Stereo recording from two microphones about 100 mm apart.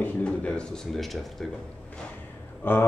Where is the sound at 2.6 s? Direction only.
20° left (ahead or behind).